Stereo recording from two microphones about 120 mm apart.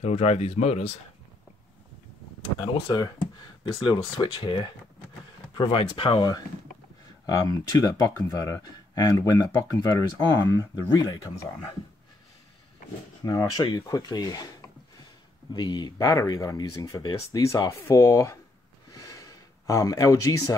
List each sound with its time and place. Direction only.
0.0 s speech: 65° left (ahead or behind)
2.6 s speech: 35° left (ahead or behind)
6.1 s speech: 35° left (ahead or behind)
13.2 s speech: 30° left (ahead or behind)
15.5 s speech: 35° left (ahead or behind)
18.9 s a sound: 30° left (ahead or behind)